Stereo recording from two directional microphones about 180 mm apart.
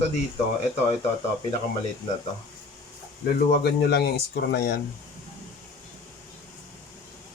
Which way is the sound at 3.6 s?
65° left (ahead or behind).